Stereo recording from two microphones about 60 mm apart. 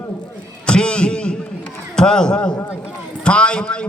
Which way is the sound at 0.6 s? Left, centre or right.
Centre.